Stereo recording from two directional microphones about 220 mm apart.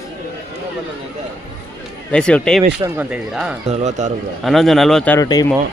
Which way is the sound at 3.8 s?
30° right (ahead or behind).